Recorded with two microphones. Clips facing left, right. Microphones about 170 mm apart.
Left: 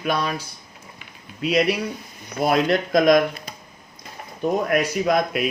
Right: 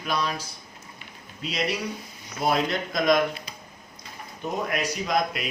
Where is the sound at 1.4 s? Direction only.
60° left (ahead or behind).